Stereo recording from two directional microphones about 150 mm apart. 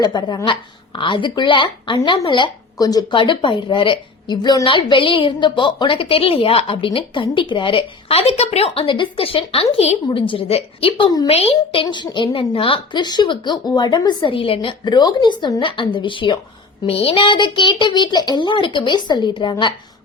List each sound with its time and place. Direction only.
0.0 s speech: 30° left (ahead or behind)